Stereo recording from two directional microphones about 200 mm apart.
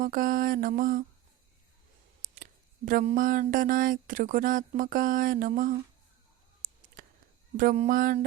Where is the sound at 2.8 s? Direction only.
40° right (ahead or behind).